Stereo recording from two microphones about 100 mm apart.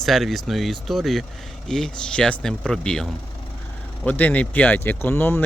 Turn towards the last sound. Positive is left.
turn(degrees=25)  # may be behind; listen again after turning